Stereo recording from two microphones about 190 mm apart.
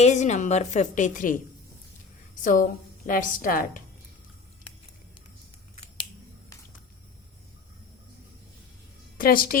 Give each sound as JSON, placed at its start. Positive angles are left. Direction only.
{"t": 0.0, "sound": "a woman's voice", "side_deg": 35}
{"t": 2.4, "sound": "a woman's voice", "side_deg": 45}
{"t": 9.1, "sound": "a woman's voice", "side_deg": 50}